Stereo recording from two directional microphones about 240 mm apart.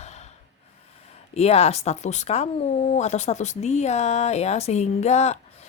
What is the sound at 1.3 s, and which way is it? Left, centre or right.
Speech, left.